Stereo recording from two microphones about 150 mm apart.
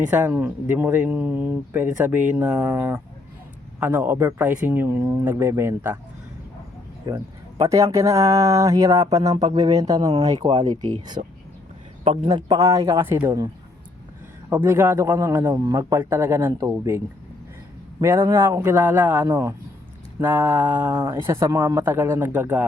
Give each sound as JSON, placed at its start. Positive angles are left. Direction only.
{"t": 0.1, "sound": "speech", "side_deg": -10}
{"t": 3.8, "sound": "speech", "side_deg": -10}
{"t": 7.1, "sound": "a man's voice", "side_deg": -25}
{"t": 12.3, "sound": "speech", "side_deg": -25}
{"t": 14.5, "sound": "speech", "side_deg": -15}
{"t": 18.0, "sound": "speech", "side_deg": -15}